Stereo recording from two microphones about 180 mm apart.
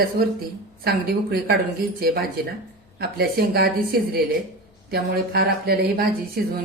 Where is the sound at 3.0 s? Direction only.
60° right (ahead or behind).